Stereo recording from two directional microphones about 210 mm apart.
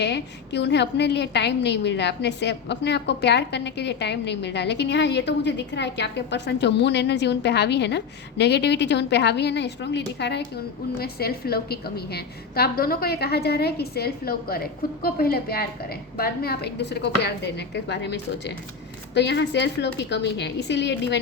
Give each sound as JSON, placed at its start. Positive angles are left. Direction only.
{"t": 0.0, "sound": "a woman's voice", "side_deg": 55}